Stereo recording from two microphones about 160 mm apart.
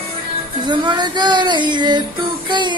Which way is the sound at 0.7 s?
25° right (ahead or behind).